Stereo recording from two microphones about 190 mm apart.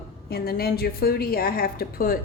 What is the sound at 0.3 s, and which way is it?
A woman's voice, 55° left (ahead or behind).